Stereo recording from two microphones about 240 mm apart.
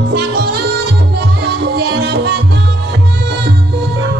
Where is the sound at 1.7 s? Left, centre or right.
Right.